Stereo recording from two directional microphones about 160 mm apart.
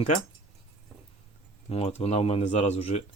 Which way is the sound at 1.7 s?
40° left (ahead or behind).